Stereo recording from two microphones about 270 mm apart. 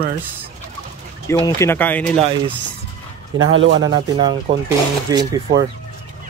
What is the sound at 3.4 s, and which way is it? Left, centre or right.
Speech, right.